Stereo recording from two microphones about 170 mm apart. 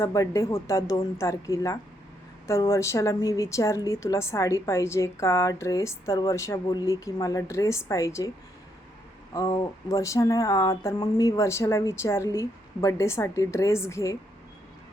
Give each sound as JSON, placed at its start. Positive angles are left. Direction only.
{"t": 0.0, "sound": "speech", "side_deg": 20}
{"t": 9.3, "sound": "speech", "side_deg": 20}